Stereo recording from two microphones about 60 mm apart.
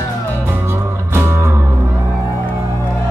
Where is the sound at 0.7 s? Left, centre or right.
Right.